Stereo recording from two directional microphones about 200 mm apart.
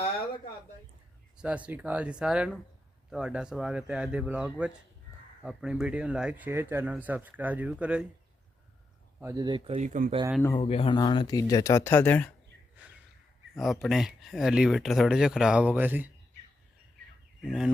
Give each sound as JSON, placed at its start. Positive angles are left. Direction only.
{"t": 1.4, "sound": "speech", "side_deg": -5}
{"t": 9.2, "sound": "speech", "side_deg": -20}
{"t": 10.6, "sound": "speech", "side_deg": 30}
{"t": 13.6, "sound": "speech", "side_deg": 0}
{"t": 17.4, "sound": "speech", "side_deg": -5}